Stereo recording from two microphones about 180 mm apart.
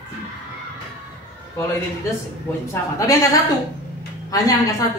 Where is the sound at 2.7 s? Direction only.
20° left (ahead or behind).